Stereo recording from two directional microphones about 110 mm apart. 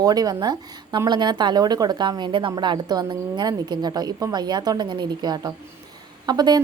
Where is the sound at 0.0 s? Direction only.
35° right (ahead or behind).